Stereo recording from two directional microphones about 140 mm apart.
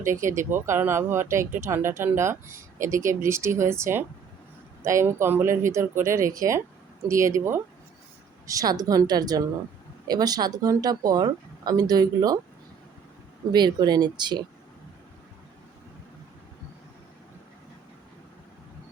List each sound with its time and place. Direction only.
0.0 s speech: 20° right (ahead or behind)
13.5 s speech: 30° right (ahead or behind)